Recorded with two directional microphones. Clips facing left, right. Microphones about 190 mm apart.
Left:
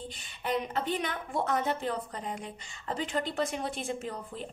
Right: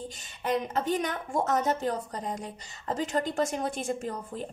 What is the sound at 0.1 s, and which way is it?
A woman's voice, 45° right (ahead or behind).